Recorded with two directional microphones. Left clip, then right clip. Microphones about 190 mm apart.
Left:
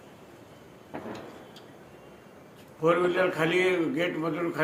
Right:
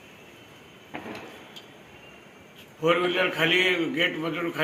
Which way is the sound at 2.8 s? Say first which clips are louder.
Right 1 dB; 5° left (ahead or behind).